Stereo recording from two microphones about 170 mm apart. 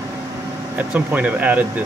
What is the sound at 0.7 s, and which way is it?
Speech, 10° right (ahead or behind).